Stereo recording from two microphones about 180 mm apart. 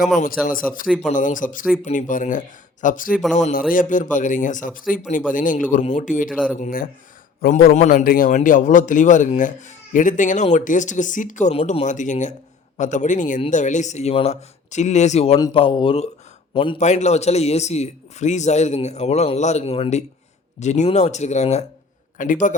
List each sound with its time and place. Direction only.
0.9 s speech: 5° right (ahead or behind)
1.1 s speech: 45° left (ahead or behind)
6.3 s speech: centre (ahead or behind)
6.6 s a man's voice: 50° left (ahead or behind); by 15.4 s 35° left (ahead or behind)
15.4 s a man's voice: 25° left (ahead or behind); by 22.5 s 45° left (ahead or behind)